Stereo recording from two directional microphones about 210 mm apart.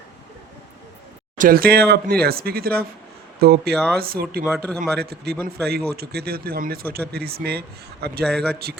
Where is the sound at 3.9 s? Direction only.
45° right (ahead or behind).